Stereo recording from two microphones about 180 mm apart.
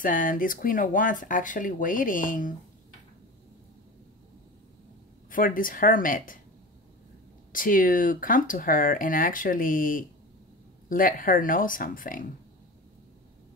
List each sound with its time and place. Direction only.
0.0 s speech: 50° left (ahead or behind)
5.3 s speech: 50° left (ahead or behind)
7.5 s speech: 50° left (ahead or behind)